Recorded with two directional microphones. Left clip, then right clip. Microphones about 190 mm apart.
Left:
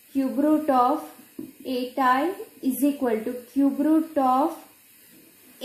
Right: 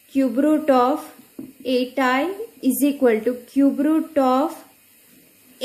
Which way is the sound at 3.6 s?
30° right (ahead or behind).